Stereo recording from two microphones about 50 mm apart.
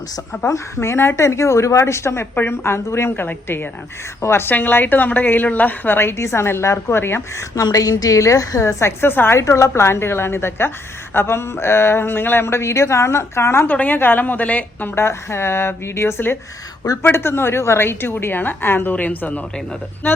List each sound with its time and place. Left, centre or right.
0.4 s a woman's voice: left
2.3 s speech: left
3.2 s a woman's voice: left
4.2 s speech: left
4.4 s a woman's voice: left
6.1 s speech: left
8.2 s speech: left
9.4 s speech: left
13.7 s a woman's voice: left
14.9 s a woman's voice: left